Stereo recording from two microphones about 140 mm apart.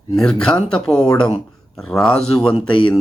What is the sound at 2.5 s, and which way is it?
Speech, 35° left (ahead or behind).